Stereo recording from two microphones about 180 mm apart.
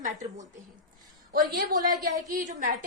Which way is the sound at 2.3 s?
50° right (ahead or behind).